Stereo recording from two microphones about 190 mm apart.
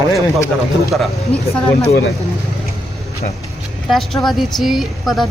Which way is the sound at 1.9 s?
60° left (ahead or behind).